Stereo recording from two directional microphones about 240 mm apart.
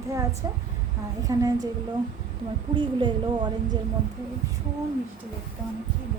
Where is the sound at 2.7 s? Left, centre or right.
Right.